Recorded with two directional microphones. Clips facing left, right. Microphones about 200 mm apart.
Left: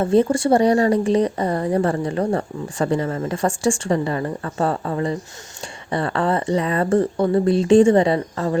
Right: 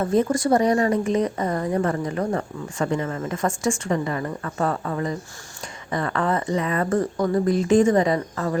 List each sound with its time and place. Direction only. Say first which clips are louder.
0.0 s speech: left 4 dB; 30° left (ahead or behind)